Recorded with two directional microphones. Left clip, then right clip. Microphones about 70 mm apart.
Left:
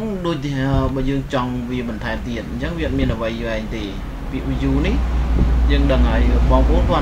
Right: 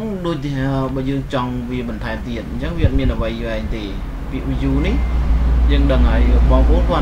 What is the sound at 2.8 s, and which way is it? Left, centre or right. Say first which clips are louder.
Speech: even; centre.